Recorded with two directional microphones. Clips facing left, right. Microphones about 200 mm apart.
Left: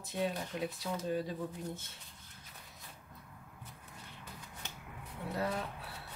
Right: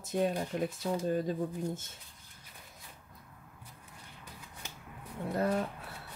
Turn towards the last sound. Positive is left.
turn(degrees=-45)  # may be behind; listen again after turning